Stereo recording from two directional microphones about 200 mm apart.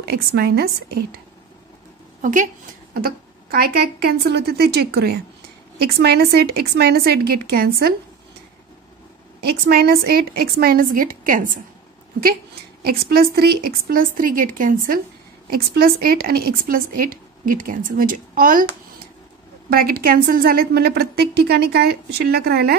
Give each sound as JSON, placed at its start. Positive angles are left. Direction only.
{"t": 0.0, "sound": "speech", "side_deg": -50}
{"t": 2.2, "sound": "speech", "side_deg": -40}
{"t": 9.4, "sound": "speech", "side_deg": -50}
{"t": 12.8, "sound": "speech", "side_deg": -50}
{"t": 19.7, "sound": "speech", "side_deg": -50}